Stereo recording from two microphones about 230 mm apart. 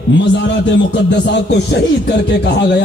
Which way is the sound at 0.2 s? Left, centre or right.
Left.